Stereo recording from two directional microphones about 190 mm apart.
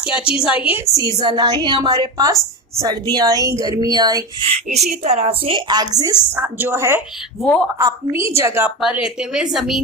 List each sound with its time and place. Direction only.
0.0 s a woman's voice: 5° right (ahead or behind)
0.7 s a woman's voice: 20° right (ahead or behind)
4.7 s a woman's voice: 35° right (ahead or behind); by 7.0 s 15° right (ahead or behind)
7.4 s a woman's voice: 5° left (ahead or behind)
7.8 s a woman's voice: 20° right (ahead or behind); by 9.8 s centre (ahead or behind)